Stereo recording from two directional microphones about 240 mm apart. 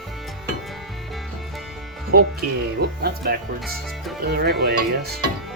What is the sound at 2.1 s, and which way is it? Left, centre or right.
Speech, right.